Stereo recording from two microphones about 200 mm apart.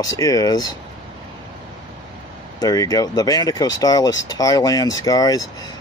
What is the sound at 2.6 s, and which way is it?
Speech, 15° left (ahead or behind).